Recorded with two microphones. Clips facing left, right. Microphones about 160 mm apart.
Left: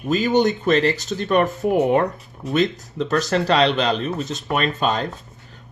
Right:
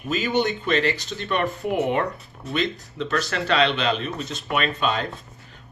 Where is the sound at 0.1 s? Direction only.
40° left (ahead or behind).